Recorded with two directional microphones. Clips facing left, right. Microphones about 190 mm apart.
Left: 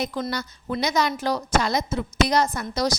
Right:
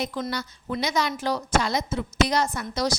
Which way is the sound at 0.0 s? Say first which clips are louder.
Left 2 dB; 40° left (ahead or behind).